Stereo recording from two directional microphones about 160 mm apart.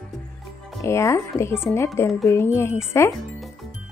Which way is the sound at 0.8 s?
20° left (ahead or behind).